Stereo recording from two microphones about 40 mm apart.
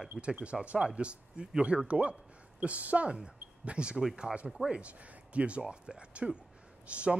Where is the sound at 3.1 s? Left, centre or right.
Right.